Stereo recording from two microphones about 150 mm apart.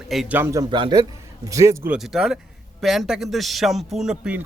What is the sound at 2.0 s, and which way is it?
A man's voice, 5° right (ahead or behind).